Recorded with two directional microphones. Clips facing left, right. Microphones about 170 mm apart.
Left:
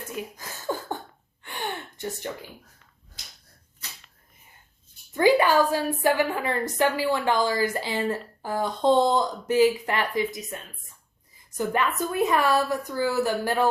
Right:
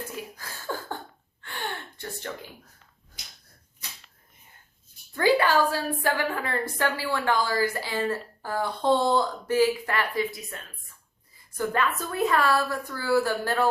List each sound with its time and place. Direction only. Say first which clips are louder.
0.3 s a sound: left 4 dB; 15° left (ahead or behind)
1.4 s gasp: left 2 dB; 15° left (ahead or behind)
5.1 s a woman's voice: left 3 dB; 15° left (ahead or behind)